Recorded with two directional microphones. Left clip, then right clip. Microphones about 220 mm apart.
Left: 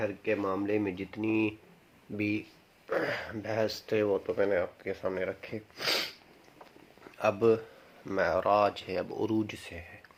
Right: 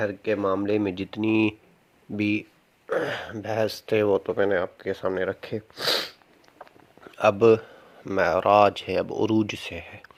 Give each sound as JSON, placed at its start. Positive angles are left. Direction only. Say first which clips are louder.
{"t": 0.0, "sound": "a man's voice", "louder": "right 6 dB", "side_deg": -45}